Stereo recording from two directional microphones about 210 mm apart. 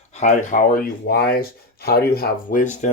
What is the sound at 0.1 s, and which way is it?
Speech, 35° left (ahead or behind).